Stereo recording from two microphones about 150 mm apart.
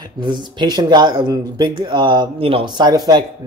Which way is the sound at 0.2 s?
30° right (ahead or behind).